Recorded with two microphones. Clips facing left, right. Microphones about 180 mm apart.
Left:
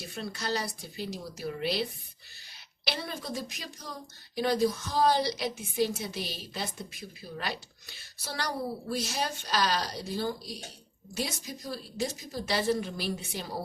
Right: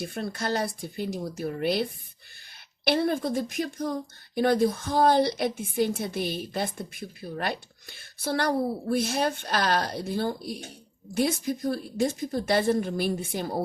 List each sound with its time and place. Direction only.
0.0 s a woman's voice: 55° right (ahead or behind)